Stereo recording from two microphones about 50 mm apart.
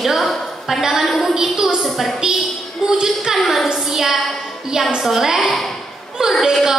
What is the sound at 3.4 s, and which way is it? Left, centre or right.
Speech, centre.